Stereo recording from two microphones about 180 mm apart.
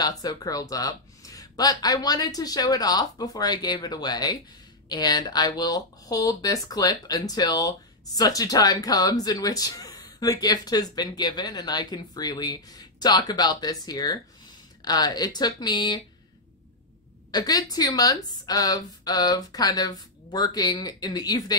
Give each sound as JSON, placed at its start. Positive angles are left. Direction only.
{"t": 0.0, "sound": "speech", "side_deg": 20}
{"t": 17.3, "sound": "speech", "side_deg": 20}